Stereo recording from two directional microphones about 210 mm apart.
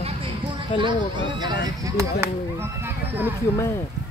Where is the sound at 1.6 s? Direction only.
15° right (ahead or behind).